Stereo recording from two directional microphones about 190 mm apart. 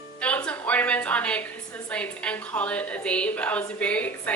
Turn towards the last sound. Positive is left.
turn(degrees=5)  # may be behind; listen again after turning